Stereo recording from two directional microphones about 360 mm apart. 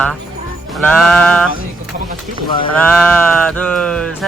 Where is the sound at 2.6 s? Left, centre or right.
Centre.